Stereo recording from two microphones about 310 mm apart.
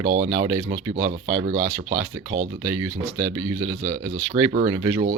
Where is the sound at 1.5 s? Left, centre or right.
Centre.